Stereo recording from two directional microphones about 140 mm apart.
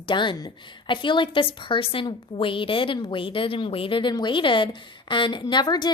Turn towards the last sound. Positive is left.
turn(degrees=30)  # may be behind; listen again after turning